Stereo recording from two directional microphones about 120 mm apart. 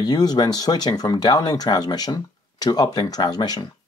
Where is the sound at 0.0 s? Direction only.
35° left (ahead or behind).